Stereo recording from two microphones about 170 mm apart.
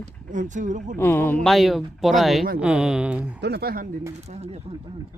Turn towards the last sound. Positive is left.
turn(degrees=-40)  # may be behind; listen again after turning